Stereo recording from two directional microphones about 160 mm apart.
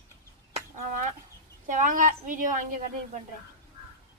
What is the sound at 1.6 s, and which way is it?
Speech, 55° right (ahead or behind).